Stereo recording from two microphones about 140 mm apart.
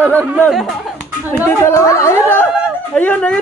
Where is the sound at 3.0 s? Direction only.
10° left (ahead or behind).